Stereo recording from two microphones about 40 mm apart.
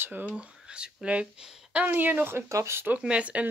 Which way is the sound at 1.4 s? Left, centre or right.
Centre.